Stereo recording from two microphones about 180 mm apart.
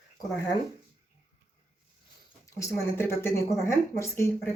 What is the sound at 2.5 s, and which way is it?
Speech, 15° left (ahead or behind).